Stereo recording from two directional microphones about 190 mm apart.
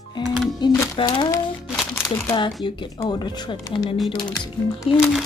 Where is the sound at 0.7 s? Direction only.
15° left (ahead or behind).